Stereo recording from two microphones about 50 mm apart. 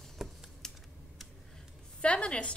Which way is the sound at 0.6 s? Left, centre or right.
Centre.